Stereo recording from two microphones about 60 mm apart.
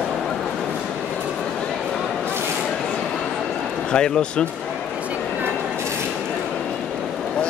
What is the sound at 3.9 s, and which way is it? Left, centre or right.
Speech, centre.